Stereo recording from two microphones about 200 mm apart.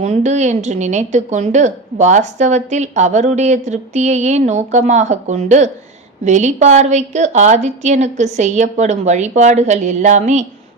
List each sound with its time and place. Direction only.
0.0 s a woman's voice: 35° right (ahead or behind)